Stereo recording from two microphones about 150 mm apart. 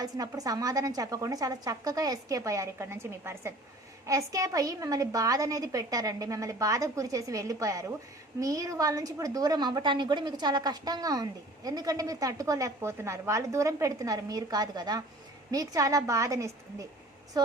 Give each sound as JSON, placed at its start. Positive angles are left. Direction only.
{"t": 0.0, "sound": "a woman's voice", "side_deg": -25}